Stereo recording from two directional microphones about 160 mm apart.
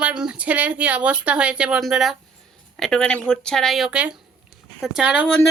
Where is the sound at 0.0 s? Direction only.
5° right (ahead or behind).